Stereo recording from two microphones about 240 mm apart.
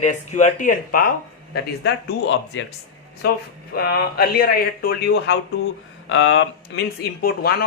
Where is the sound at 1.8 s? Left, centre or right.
Left.